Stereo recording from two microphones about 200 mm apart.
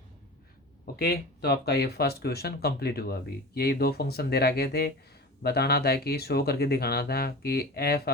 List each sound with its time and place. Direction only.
0.9 s speech: 50° left (ahead or behind)